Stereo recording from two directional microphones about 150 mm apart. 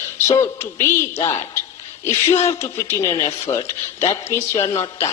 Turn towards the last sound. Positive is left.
turn(degrees=20)  # may be behind; listen again after turning